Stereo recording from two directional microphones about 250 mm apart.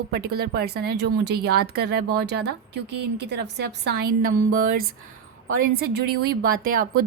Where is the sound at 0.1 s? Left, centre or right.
Right.